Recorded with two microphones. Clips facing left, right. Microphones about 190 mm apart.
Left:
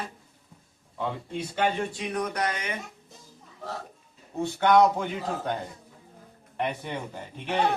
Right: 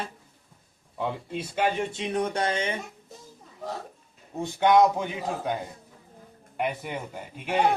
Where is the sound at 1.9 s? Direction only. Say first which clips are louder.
Right 3 dB; 25° right (ahead or behind).